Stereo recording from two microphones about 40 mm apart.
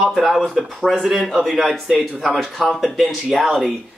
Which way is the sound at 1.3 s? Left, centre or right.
Centre.